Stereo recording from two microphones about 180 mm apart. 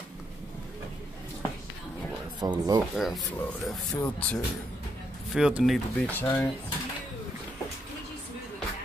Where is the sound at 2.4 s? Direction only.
20° right (ahead or behind).